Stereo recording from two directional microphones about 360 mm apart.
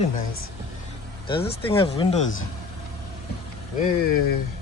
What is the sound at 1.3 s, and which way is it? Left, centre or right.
Speech, centre.